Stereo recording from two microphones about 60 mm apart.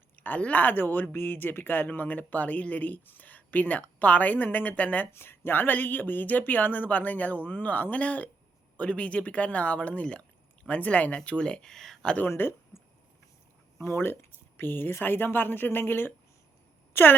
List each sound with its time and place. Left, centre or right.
0.2 s speech: left
5.1 s speech: left; by 12.1 s centre
12.3 s speech: left
13.8 s speech: left